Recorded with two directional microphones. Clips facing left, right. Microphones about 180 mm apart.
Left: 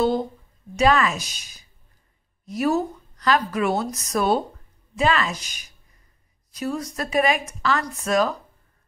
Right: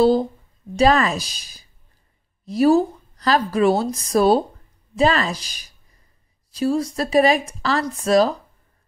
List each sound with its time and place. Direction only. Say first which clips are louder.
0.7 s a woman's voice: right 3 dB; 35° right (ahead or behind)